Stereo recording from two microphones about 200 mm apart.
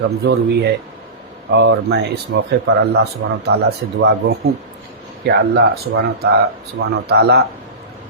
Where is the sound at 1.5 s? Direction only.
60° right (ahead or behind).